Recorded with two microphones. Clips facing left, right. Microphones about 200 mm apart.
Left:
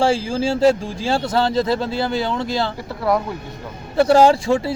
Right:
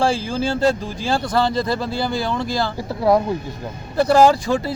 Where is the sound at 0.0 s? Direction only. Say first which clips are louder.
Left 2 dB; 25° left (ahead or behind).